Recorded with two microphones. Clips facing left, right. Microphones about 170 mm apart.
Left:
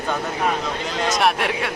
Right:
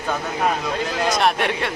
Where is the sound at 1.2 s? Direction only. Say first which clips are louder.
Even; 5° left (ahead or behind).